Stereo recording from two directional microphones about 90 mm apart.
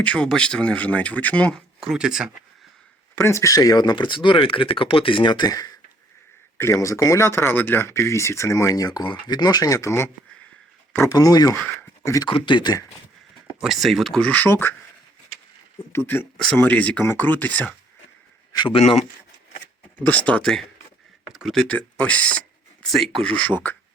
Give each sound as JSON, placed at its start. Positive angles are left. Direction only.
{"t": 0.0, "sound": "speech", "side_deg": 15}
{"t": 1.8, "sound": "speech", "side_deg": -5}
{"t": 3.2, "sound": "speech", "side_deg": 30}
{"t": 6.6, "sound": "speech", "side_deg": 35}
{"t": 11.1, "sound": "speech", "side_deg": 40}
{"t": 12.3, "sound": "speech", "side_deg": 60}
{"t": 13.6, "sound": "speech", "side_deg": 0}
{"t": 14.3, "sound": "speech", "side_deg": 20}
{"t": 15.9, "sound": "speech", "side_deg": 25}
{"t": 20.1, "sound": "speech", "side_deg": 15}
{"t": 21.7, "sound": "speech", "side_deg": 15}
{"t": 22.8, "sound": "speech", "side_deg": 0}